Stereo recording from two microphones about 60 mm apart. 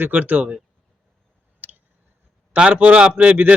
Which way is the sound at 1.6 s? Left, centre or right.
Right.